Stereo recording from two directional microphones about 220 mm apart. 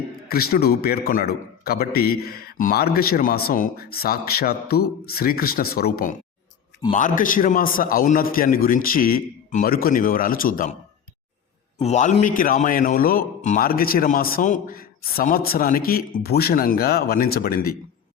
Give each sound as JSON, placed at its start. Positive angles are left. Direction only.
{"t": 0.3, "sound": "a man's voice", "side_deg": 45}
{"t": 11.8, "sound": "a man's voice", "side_deg": 30}